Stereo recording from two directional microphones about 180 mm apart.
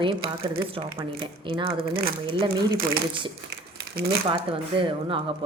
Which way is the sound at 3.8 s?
65° right (ahead or behind).